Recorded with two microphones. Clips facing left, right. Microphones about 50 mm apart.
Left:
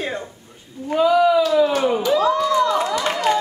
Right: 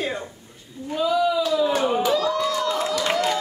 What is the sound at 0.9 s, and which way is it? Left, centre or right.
Speech, left.